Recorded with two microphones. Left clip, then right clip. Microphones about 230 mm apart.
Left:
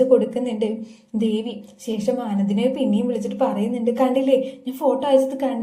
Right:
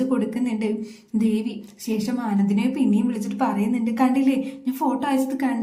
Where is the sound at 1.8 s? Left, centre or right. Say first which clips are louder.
Left 4 dB; centre.